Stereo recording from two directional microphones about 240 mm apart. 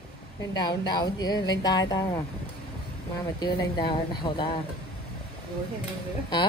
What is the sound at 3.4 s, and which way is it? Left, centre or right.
Speech, centre.